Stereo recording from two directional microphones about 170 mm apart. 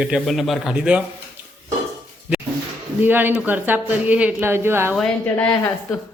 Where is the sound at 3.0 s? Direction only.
10° right (ahead or behind).